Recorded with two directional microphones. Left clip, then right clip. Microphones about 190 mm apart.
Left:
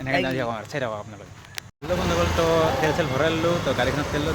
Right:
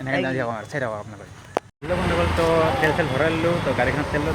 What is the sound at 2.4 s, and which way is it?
Speech, 10° left (ahead or behind).